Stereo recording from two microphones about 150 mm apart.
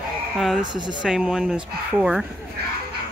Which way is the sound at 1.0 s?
5° right (ahead or behind).